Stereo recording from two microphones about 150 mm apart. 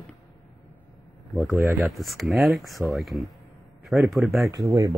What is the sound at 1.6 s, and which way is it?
Speech, 15° right (ahead or behind).